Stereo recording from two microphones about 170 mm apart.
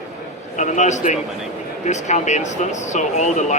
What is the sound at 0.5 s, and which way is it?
Speech, 45° left (ahead or behind).